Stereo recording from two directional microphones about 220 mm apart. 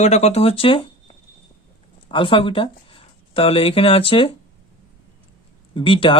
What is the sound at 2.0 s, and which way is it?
Speech, 25° left (ahead or behind).